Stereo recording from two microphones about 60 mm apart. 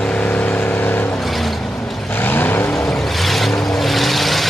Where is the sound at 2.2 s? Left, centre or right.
Left.